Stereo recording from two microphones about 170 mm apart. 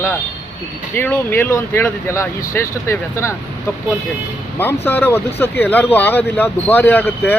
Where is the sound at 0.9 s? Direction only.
10° left (ahead or behind).